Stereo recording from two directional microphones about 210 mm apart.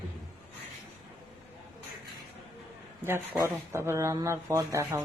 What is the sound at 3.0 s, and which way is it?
Speech, 10° right (ahead or behind).